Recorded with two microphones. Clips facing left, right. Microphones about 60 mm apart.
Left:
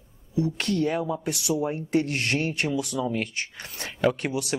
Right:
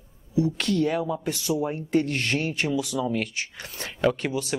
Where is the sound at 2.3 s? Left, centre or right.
Left.